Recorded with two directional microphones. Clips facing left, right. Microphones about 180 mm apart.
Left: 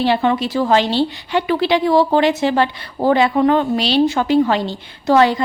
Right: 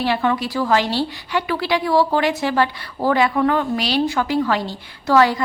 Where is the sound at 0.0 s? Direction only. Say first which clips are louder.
Left 4 dB; 25° left (ahead or behind).